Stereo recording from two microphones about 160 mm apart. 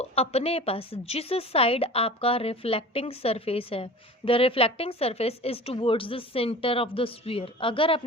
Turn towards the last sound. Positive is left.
turn(degrees=35)  # may be behind; listen again after turning